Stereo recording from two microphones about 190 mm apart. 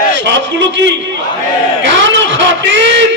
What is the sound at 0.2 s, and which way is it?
Speech, 75° right (ahead or behind).